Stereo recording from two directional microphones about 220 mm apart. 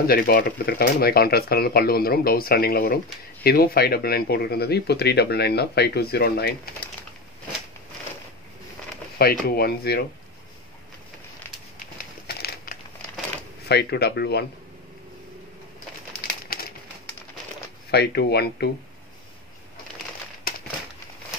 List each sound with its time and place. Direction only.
0.0 s speech: 45° left (ahead or behind)
9.2 s speech: 45° left (ahead or behind)
12.3 s a sound: 45° left (ahead or behind)
13.7 s speech: 50° left (ahead or behind)
17.9 s speech: 45° left (ahead or behind)